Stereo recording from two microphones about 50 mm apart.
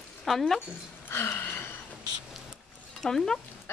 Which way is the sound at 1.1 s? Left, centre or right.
Left.